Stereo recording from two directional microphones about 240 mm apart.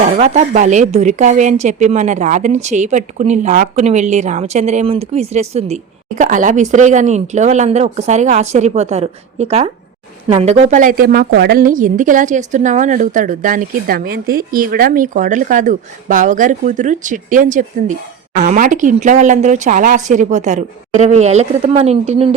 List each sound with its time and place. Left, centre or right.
0.2 s a woman's voice: right